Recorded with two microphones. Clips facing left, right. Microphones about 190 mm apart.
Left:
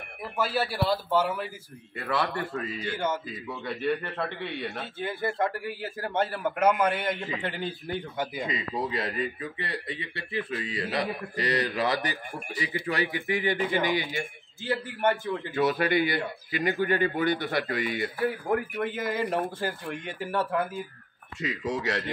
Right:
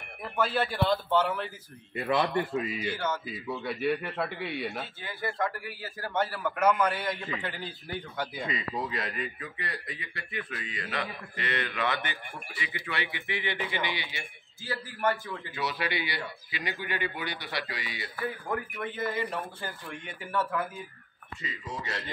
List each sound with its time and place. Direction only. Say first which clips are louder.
0.2 s speech: even; 10° left (ahead or behind)
2.0 s a man's voice: right 2 dB; 20° right (ahead or behind)
5.0 s a man's voice: left 5 dB; 25° left (ahead or behind); by 14.2 s 45° left (ahead or behind)
14.9 s a man's voice: left 2 dB; 25° left (ahead or behind)
15.5 s a man's voice: left 8 dB; 50° left (ahead or behind)
18.9 s speech: right 1 dB; 90° left
20.1 s a man's voice: left 2 dB; 30° left (ahead or behind)
21.4 s speech: left 9 dB; 80° left